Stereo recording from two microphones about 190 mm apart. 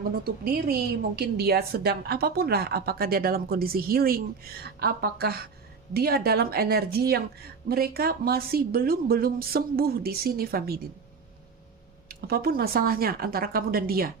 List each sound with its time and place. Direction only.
0.3 s a woman's voice: 50° right (ahead or behind)
12.0 s a woman's voice: 55° right (ahead or behind)